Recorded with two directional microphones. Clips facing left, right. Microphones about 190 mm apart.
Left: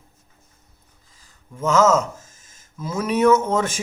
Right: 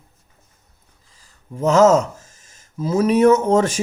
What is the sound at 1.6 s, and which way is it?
A man's voice, 35° right (ahead or behind).